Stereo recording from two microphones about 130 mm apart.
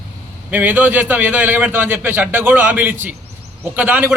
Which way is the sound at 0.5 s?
15° right (ahead or behind).